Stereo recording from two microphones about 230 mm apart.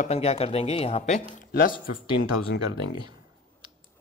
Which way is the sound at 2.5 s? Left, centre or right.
Left.